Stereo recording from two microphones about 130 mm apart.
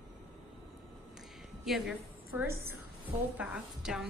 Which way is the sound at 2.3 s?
20° right (ahead or behind).